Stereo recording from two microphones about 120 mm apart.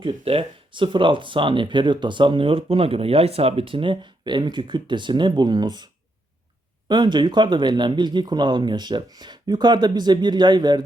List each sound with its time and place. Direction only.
0.0 s speech: 45° right (ahead or behind)